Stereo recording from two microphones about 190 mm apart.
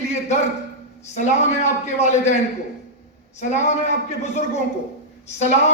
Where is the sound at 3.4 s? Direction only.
40° left (ahead or behind).